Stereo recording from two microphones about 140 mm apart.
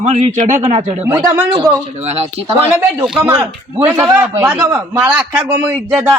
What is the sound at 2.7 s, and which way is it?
A man's voice, 15° right (ahead or behind).